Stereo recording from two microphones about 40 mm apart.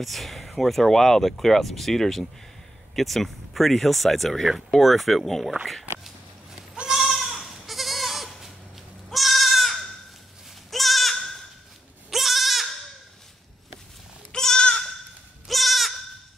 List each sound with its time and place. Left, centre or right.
0.0 s speech: centre
6.9 s goat: centre
14.3 s goat: centre
15.4 s goat: centre